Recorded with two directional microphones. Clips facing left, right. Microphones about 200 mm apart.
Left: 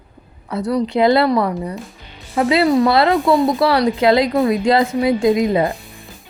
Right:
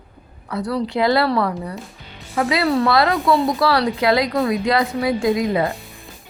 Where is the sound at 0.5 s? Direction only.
25° left (ahead or behind).